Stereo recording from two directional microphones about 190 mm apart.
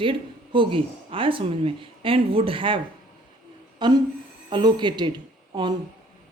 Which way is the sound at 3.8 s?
25° right (ahead or behind).